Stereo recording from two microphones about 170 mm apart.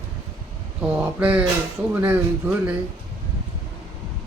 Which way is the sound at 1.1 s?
10° right (ahead or behind).